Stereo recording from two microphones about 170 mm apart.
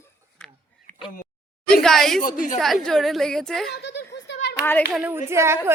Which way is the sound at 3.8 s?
90° left.